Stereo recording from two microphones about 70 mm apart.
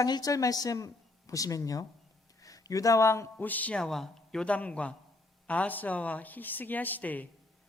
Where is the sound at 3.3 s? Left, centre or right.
Left.